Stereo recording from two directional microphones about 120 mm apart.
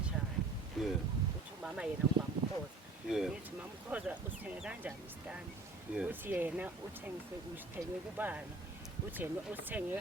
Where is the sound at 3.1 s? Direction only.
5° right (ahead or behind).